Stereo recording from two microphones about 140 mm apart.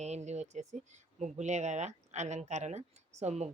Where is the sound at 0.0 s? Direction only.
55° right (ahead or behind).